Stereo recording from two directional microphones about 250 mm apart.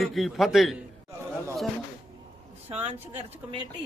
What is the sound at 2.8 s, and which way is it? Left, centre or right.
Speech, right.